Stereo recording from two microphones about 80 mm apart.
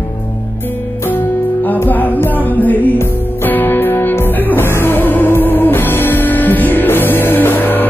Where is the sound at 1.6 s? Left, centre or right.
Left.